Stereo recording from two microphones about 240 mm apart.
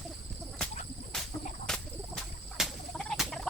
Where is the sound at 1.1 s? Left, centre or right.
Centre.